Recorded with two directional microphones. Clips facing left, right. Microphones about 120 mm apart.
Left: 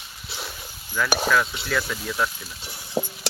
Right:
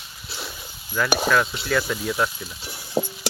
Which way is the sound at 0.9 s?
10° right (ahead or behind).